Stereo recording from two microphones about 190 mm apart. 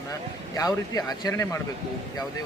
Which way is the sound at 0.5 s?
20° left (ahead or behind).